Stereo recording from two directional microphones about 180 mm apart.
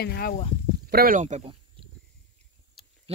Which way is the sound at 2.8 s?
Centre (ahead or behind).